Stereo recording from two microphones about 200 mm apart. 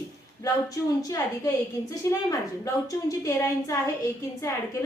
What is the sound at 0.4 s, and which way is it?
A woman's voice, 15° left (ahead or behind).